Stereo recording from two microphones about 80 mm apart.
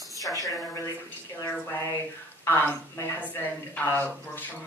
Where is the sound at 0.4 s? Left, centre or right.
Left.